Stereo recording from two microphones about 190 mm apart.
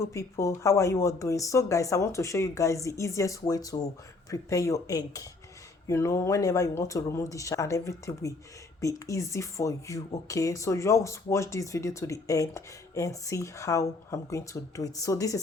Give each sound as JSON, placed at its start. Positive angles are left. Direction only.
{"t": 0.0, "sound": "speech", "side_deg": 15}